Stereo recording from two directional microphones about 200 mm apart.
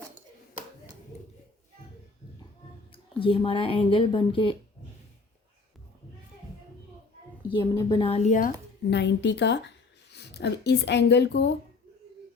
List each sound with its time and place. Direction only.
2.9 s speech: 25° left (ahead or behind)
7.6 s speech: 15° left (ahead or behind); by 8.5 s 40° left (ahead or behind)
8.9 s a woman's voice: 60° left (ahead or behind)